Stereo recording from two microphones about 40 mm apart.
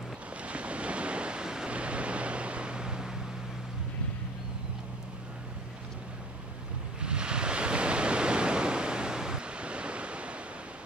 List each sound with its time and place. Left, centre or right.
0.4 s waves: right
1.7 s vehicle: right
7.0 s waves: right